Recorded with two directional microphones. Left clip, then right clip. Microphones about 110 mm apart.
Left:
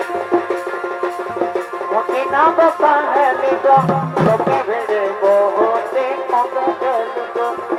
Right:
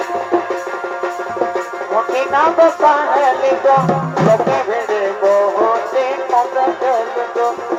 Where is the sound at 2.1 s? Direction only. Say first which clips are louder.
Left 1 dB; 5° left (ahead or behind).